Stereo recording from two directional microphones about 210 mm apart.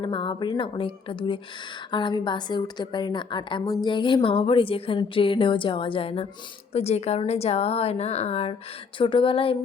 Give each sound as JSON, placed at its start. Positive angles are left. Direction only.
{"t": 0.0, "sound": "speech", "side_deg": 25}